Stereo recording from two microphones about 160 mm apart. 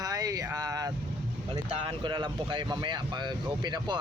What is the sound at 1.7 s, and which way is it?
Speech, 35° right (ahead or behind).